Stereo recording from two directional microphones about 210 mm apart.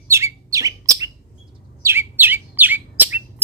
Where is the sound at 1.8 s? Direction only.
10° right (ahead or behind).